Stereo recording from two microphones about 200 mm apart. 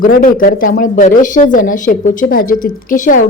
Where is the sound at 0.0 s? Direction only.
45° left (ahead or behind).